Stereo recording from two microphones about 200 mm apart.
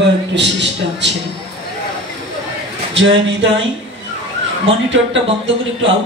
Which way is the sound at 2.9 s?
70° right (ahead or behind).